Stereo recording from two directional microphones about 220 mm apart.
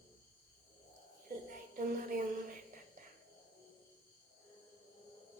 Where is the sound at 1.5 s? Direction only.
40° right (ahead or behind).